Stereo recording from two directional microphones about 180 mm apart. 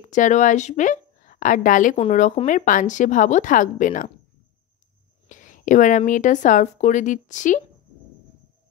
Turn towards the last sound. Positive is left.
turn(degrees=45)  # may be behind; listen again after turning